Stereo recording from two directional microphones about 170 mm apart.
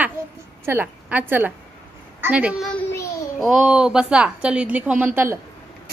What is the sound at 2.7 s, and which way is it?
Child singing, 15° left (ahead or behind).